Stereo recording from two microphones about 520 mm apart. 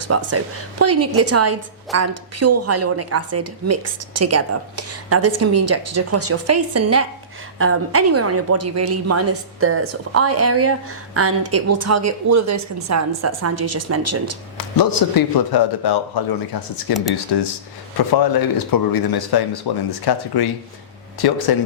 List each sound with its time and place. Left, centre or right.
0.0 s a woman's voice: right
14.6 s speech: left